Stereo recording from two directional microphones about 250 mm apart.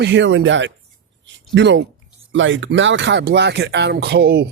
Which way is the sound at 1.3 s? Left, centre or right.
Right.